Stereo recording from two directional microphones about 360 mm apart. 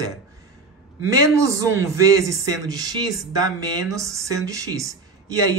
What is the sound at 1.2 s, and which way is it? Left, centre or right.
Speech, centre.